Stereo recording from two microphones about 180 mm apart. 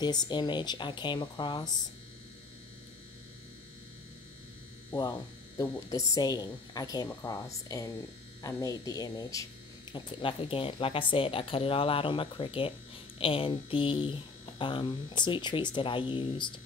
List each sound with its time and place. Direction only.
0.0 s speech: 25° left (ahead or behind)
5.6 s speech: 20° left (ahead or behind)